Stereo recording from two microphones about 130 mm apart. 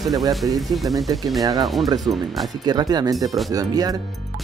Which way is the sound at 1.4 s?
30° right (ahead or behind).